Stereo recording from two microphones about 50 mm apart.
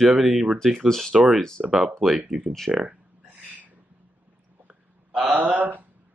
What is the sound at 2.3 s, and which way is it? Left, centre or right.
Speech, centre.